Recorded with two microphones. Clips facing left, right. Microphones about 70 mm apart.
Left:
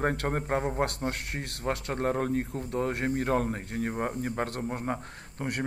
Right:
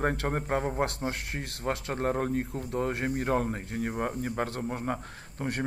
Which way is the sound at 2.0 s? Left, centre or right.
Left.